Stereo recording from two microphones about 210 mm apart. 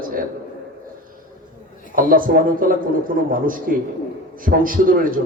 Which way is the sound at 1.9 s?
40° right (ahead or behind).